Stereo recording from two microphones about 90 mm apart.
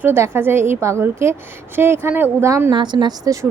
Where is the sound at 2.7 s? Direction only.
60° right (ahead or behind).